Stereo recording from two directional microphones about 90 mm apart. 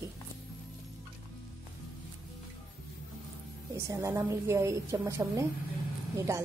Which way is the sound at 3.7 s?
30° right (ahead or behind).